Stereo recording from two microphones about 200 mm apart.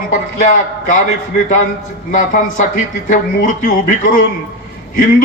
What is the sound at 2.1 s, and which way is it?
A man's voice, 40° left (ahead or behind).